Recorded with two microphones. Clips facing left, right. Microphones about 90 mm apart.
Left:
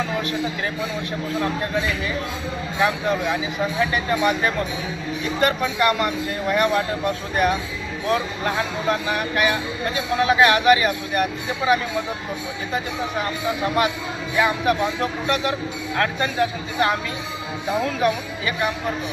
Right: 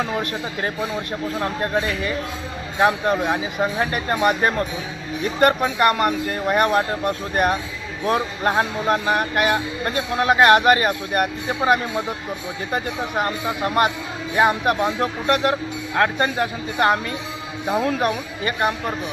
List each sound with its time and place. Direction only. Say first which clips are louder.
1.4 s speech: right 1 dB; 45° right (ahead or behind)
8.0 s speech: right 2 dB; 40° right (ahead or behind)
14.3 s speech: right 2 dB; 45° right (ahead or behind)